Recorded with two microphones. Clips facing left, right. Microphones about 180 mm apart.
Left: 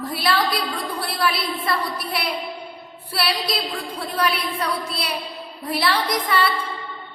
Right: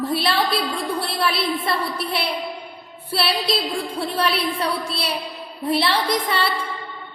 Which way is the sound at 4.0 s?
30° right (ahead or behind).